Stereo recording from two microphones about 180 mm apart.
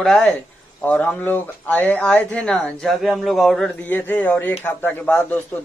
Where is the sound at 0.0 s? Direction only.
5° left (ahead or behind).